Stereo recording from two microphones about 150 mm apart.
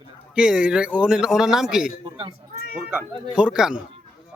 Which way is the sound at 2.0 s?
35° right (ahead or behind).